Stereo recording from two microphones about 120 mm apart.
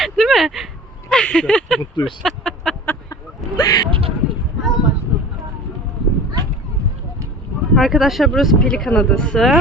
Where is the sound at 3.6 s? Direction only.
30° left (ahead or behind).